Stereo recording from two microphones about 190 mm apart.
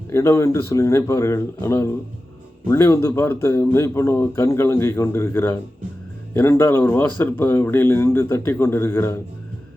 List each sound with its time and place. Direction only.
0.1 s speech: 15° left (ahead or behind)